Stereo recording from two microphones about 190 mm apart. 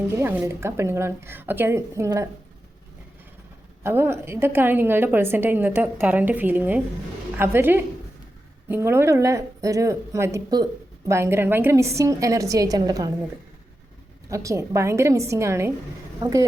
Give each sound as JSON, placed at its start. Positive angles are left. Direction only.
{"t": 0.2, "sound": "a woman's voice", "side_deg": -10}
{"t": 3.8, "sound": "a woman's voice", "side_deg": -15}
{"t": 14.3, "sound": "a woman's voice", "side_deg": -15}